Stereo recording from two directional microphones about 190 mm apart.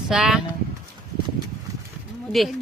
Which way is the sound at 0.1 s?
5° right (ahead or behind).